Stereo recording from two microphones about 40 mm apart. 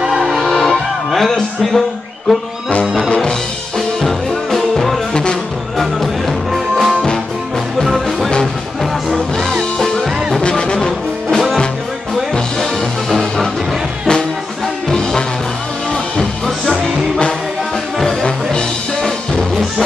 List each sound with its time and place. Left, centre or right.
0.2 s music: centre
4.0 s music: centre
5.1 s music: left
5.8 s music: centre
10.7 s music: centre
13.1 s music: centre
14.9 s music: centre
18.0 s music: centre